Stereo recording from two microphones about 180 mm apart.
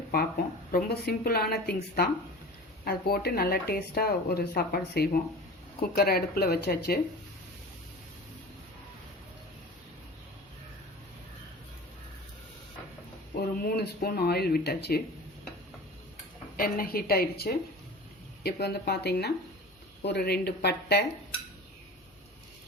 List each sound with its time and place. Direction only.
0.1 s speech: 55° left (ahead or behind)
13.3 s speech: 55° left (ahead or behind)
16.6 s speech: 55° left (ahead or behind)